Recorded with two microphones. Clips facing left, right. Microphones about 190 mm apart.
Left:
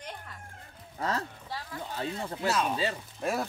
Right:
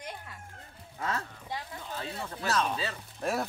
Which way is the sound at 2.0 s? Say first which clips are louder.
Left 4 dB; 30° left (ahead or behind).